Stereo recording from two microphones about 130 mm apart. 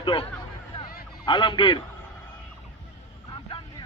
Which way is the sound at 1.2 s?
35° left (ahead or behind).